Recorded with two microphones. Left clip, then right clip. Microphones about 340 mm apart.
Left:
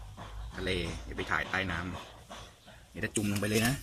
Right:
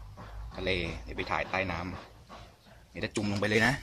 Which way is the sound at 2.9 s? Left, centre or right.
Centre.